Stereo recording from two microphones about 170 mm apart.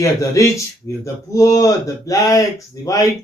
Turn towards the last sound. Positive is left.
turn(degrees=20)  # may be behind; listen again after turning